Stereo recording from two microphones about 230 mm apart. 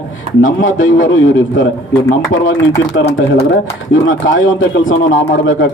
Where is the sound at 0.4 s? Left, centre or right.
Left.